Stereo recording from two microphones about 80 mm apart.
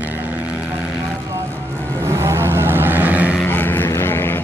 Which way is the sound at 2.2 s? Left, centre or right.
Right.